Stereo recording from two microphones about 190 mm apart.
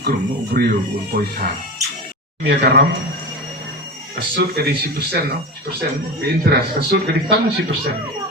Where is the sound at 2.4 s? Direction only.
65° right (ahead or behind).